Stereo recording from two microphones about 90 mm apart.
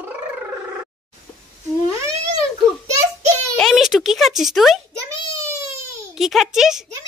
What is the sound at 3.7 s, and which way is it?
Speech, 5° right (ahead or behind).